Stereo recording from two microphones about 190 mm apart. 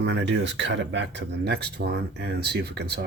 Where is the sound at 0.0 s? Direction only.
65° right (ahead or behind).